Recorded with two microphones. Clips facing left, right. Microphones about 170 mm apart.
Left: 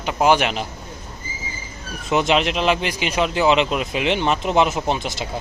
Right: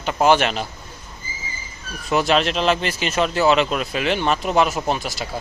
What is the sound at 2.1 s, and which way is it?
Speech, 20° left (ahead or behind).